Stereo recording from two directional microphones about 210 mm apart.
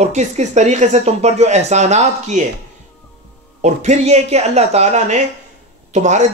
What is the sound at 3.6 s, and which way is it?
Speech, 35° right (ahead or behind).